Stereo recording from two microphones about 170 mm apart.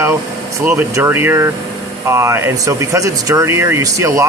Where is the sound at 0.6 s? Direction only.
15° right (ahead or behind).